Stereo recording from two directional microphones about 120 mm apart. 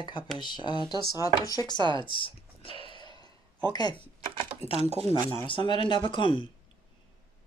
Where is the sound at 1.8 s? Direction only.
40° right (ahead or behind).